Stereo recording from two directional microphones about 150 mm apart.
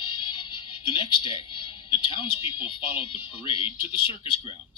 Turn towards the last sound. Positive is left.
turn(degrees=40)  # may be behind; listen again after turning